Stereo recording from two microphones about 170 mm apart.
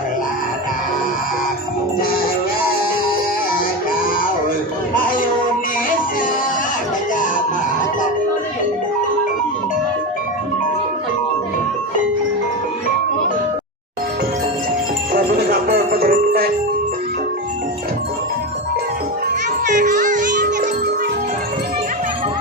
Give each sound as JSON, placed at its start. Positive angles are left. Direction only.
{"t": 15.1, "sound": "music", "side_deg": -65}
{"t": 19.6, "sound": "music", "side_deg": -50}